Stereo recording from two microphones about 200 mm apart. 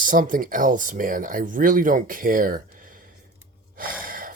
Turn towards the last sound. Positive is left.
turn(degrees=-45)  # may be behind; listen again after turning